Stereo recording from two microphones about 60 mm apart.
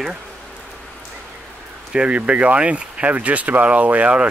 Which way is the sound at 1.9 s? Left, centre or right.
Centre.